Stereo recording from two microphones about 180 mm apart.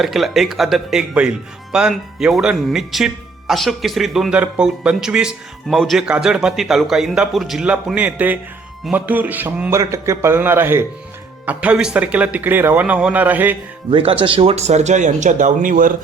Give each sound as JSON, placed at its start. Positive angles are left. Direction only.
{"t": 0.0, "sound": "speech", "side_deg": 0}
{"t": 13.9, "sound": "speech", "side_deg": -30}